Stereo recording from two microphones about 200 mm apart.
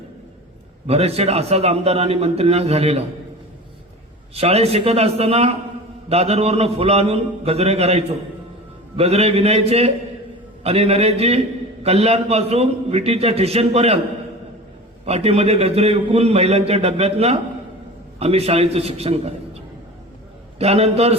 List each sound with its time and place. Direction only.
0.9 s a man's voice: 30° right (ahead or behind)
4.4 s a man's voice: 30° right (ahead or behind)
15.0 s a man's voice: 30° right (ahead or behind)